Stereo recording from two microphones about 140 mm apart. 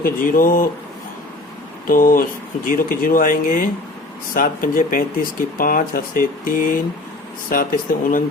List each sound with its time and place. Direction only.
0.0 s speech: 80° left
1.9 s speech: 80° left